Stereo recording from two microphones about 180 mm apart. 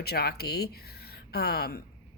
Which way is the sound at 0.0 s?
60° left (ahead or behind).